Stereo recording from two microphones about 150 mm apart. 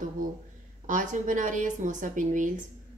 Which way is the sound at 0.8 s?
60° right (ahead or behind).